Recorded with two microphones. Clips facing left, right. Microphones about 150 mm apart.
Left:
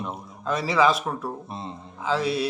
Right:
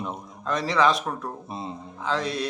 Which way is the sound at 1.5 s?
5° right (ahead or behind).